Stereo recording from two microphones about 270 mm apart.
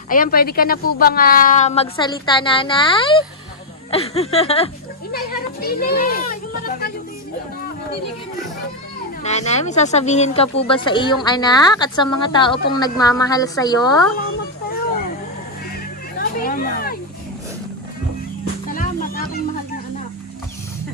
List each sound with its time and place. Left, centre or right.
0.1 s a woman's voice: left
5.1 s a child's voice: left
9.2 s a woman's voice: left
14.2 s a sound: left
16.1 s a sound: left
18.7 s music: left